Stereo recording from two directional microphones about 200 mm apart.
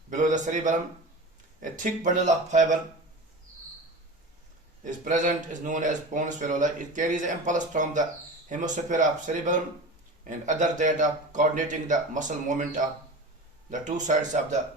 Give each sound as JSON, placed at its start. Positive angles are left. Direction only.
{"t": 0.1, "sound": "speech", "side_deg": -40}
{"t": 4.8, "sound": "speech", "side_deg": -40}